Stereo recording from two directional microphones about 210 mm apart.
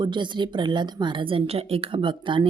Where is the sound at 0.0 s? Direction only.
20° right (ahead or behind).